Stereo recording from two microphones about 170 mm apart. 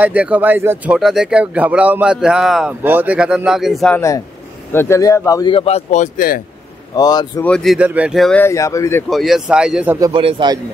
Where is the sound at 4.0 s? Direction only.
20° left (ahead or behind).